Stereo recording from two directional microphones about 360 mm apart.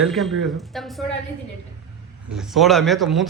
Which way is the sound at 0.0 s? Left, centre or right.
Centre.